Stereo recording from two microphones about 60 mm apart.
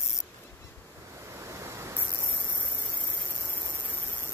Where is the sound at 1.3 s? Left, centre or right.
Right.